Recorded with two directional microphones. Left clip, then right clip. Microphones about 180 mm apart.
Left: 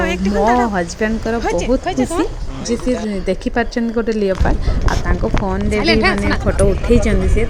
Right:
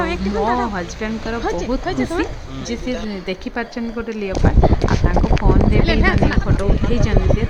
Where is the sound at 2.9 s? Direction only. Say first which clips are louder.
Left 5 dB; 25° left (ahead or behind).